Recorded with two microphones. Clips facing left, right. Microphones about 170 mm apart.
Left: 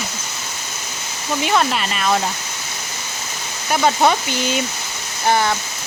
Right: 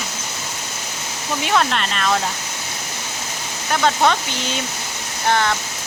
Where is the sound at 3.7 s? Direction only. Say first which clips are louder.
Left 2 dB; 10° left (ahead or behind).